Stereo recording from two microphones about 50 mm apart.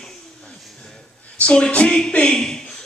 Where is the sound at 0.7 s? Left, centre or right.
Centre.